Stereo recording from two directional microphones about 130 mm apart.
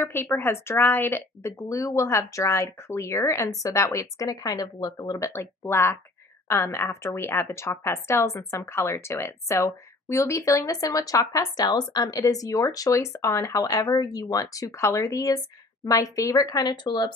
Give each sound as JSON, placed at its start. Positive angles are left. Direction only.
{"t": 0.0, "sound": "a woman's voice", "side_deg": 15}